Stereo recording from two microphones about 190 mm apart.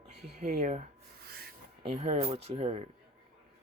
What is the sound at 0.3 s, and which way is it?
Speech, 35° right (ahead or behind).